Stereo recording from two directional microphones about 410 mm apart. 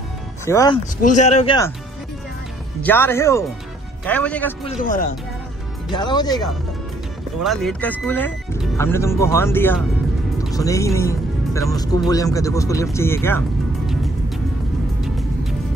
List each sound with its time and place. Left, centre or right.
0.5 s speech: centre
2.8 s speech: centre
5.9 s speech: centre
7.4 s speech: centre